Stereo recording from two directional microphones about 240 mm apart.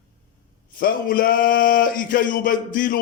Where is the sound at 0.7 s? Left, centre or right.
Left.